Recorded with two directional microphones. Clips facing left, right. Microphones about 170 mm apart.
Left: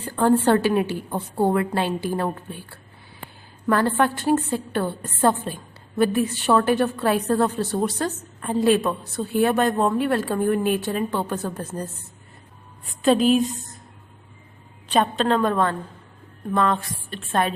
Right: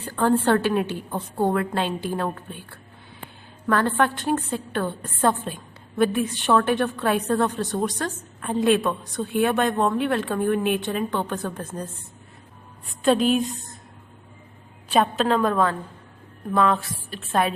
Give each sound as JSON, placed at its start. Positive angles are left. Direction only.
{"t": 0.1, "sound": "a woman's voice", "side_deg": 15}
{"t": 13.0, "sound": "a woman's voice", "side_deg": 0}
{"t": 14.8, "sound": "a woman's voice", "side_deg": -5}